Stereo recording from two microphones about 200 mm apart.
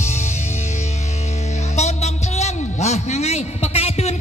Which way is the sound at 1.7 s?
35° left (ahead or behind).